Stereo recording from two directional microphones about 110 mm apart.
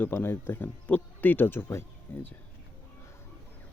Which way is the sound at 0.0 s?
20° left (ahead or behind).